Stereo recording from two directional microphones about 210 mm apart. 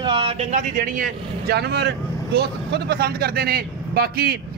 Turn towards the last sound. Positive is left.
turn(degrees=-45)  # may be behind; listen again after turning